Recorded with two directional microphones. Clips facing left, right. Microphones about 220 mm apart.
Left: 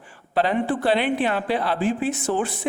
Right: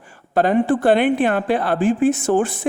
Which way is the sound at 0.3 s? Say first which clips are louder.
Right 5 dB; 45° right (ahead or behind).